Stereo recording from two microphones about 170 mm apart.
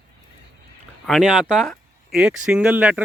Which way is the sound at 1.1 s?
5° left (ahead or behind).